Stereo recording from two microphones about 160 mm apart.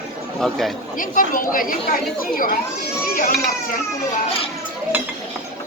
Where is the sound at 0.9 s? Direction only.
55° left (ahead or behind).